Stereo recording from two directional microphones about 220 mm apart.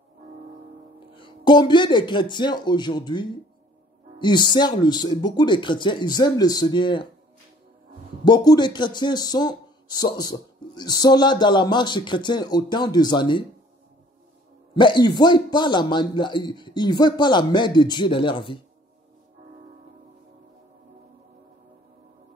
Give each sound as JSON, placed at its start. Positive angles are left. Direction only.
{"t": 1.1, "sound": "speech", "side_deg": 20}
{"t": 8.3, "sound": "speech", "side_deg": 20}
{"t": 14.7, "sound": "speech", "side_deg": 20}